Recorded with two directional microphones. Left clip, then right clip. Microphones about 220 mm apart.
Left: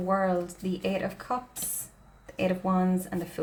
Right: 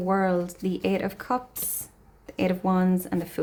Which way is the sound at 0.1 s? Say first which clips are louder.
Right 2 dB; 40° right (ahead or behind).